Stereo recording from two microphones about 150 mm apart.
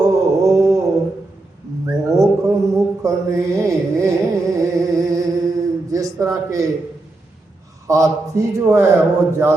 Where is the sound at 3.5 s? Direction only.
20° right (ahead or behind).